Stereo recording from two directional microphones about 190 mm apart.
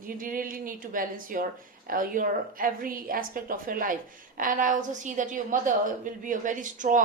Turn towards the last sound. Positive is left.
turn(degrees=-45)  # may be behind; listen again after turning